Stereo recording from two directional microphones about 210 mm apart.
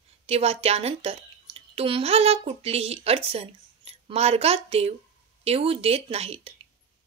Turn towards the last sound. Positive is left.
turn(degrees=-30)  # may be behind; listen again after turning